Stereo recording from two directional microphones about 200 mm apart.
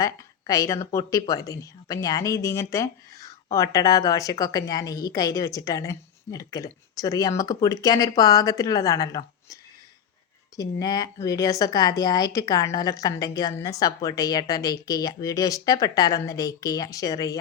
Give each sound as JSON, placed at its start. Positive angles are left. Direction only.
{"t": 0.0, "sound": "speech", "side_deg": 15}
{"t": 10.6, "sound": "speech", "side_deg": 20}